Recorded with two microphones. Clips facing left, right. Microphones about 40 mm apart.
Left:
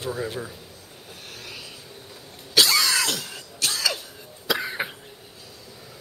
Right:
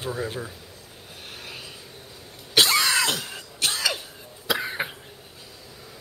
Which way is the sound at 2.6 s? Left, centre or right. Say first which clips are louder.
Even; right.